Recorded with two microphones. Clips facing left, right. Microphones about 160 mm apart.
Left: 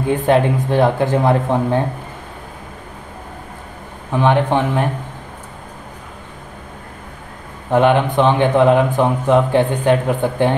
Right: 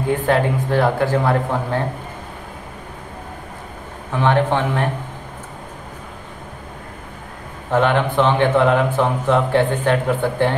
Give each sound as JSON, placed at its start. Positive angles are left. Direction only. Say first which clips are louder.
{"t": 0.1, "sound": "speech", "louder": "left 3 dB", "side_deg": 20}
{"t": 4.2, "sound": "speech", "louder": "left 2 dB", "side_deg": 15}
{"t": 7.7, "sound": "speech", "louder": "left 3 dB", "side_deg": 15}